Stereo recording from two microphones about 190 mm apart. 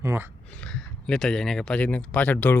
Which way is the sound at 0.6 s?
5° left (ahead or behind).